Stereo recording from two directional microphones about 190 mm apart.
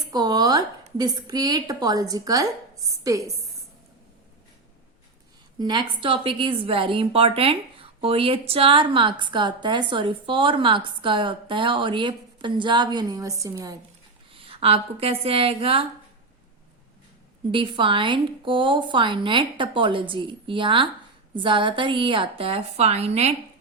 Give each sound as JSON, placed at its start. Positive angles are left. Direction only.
{"t": 0.1, "sound": "a woman's voice", "side_deg": -20}
{"t": 5.5, "sound": "a woman's voice", "side_deg": -20}
{"t": 14.3, "sound": "a woman's voice", "side_deg": -30}
{"t": 17.5, "sound": "a woman's voice", "side_deg": -25}